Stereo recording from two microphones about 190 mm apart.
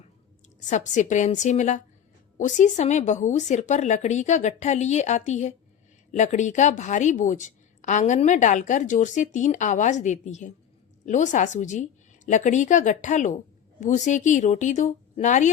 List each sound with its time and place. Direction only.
0.7 s a woman's voice: 40° left (ahead or behind)